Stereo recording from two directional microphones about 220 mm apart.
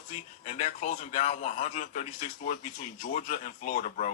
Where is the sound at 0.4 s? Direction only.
35° left (ahead or behind).